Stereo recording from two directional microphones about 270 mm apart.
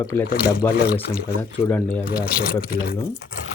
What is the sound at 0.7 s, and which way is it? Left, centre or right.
Speech, left.